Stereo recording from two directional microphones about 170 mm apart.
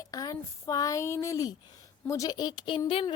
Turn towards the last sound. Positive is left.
turn(degrees=30)  # may be behind; listen again after turning